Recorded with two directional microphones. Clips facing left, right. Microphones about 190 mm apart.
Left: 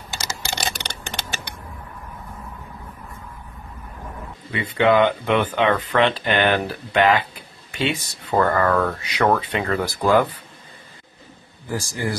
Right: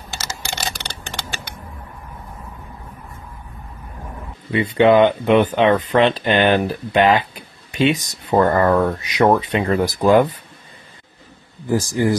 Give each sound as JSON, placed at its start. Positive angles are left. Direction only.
{"t": 0.2, "sound": "typing", "side_deg": 20}
{"t": 4.5, "sound": "speech", "side_deg": -25}
{"t": 11.6, "sound": "speech", "side_deg": -20}